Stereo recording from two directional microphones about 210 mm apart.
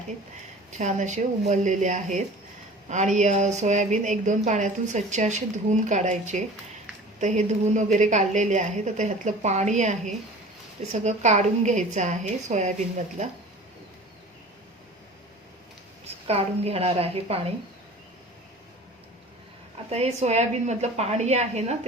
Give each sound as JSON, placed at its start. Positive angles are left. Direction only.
{"t": 0.7, "sound": "a woman's voice", "side_deg": -35}
{"t": 16.2, "sound": "a woman's voice", "side_deg": -30}
{"t": 19.9, "sound": "a woman's voice", "side_deg": -30}